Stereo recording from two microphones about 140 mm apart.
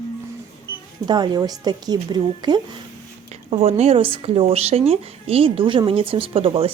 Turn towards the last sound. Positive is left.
turn(degrees=-40)  # may be behind; listen again after turning